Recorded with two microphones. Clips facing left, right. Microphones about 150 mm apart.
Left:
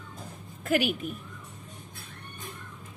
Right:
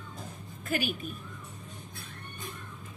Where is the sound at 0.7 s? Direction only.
75° left (ahead or behind).